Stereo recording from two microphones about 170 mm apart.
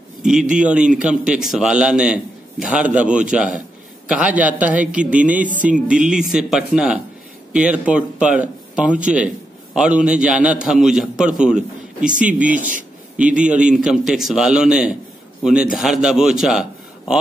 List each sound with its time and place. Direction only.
0.2 s a man's voice: 5° right (ahead or behind)
12.4 s a man's voice: 50° right (ahead or behind)
13.2 s a man's voice: 5° right (ahead or behind)